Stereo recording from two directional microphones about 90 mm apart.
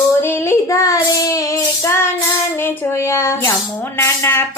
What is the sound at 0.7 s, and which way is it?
Child singing, 35° left (ahead or behind).